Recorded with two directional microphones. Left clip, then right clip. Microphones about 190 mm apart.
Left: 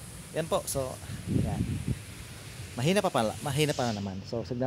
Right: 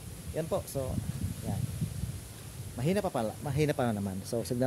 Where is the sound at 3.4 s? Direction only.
5° left (ahead or behind).